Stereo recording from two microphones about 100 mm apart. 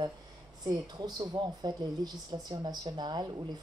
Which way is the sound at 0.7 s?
40° right (ahead or behind).